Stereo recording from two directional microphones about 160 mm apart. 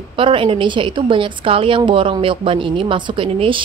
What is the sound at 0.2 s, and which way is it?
A woman's voice, 30° right (ahead or behind).